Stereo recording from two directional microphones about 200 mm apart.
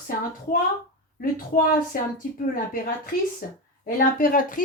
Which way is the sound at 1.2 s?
45° left (ahead or behind).